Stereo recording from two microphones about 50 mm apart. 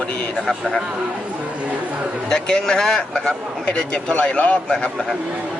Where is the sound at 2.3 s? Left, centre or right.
Centre.